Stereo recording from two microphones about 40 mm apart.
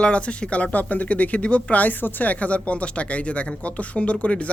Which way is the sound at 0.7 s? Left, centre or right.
Left.